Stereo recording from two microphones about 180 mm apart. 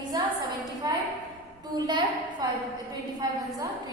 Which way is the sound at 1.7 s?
25° right (ahead or behind).